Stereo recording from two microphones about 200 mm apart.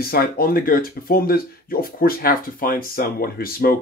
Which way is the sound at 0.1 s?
50° left (ahead or behind).